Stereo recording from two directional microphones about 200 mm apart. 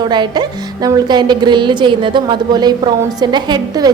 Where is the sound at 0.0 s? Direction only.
20° right (ahead or behind).